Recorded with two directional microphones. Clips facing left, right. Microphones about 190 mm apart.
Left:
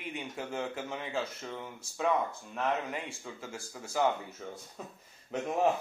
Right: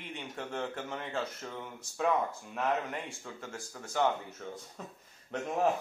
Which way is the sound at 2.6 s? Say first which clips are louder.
Even; centre (ahead or behind).